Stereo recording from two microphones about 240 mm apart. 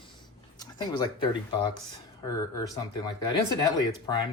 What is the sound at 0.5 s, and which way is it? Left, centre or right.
Speech, centre.